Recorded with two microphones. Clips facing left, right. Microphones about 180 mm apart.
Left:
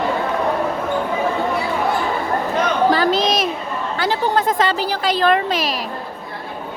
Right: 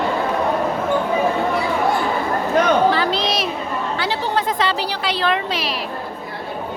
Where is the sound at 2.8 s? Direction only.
40° left (ahead or behind).